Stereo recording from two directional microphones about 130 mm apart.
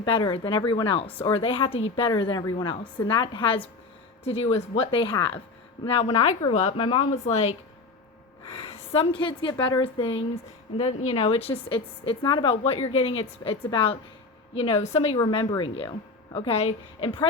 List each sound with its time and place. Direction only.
0.0 s a woman's voice: 35° left (ahead or behind)
4.2 s a woman's voice: 50° left (ahead or behind)
10.8 s a woman's voice: 50° left (ahead or behind); by 12.5 s 35° left (ahead or behind)
12.6 s a woman's voice: 50° left (ahead or behind)
15.1 s a woman's voice: 40° left (ahead or behind)